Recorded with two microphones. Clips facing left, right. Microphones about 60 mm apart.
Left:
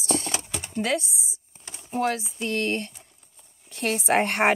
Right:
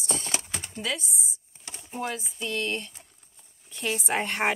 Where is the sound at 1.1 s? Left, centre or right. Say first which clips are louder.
Even; left.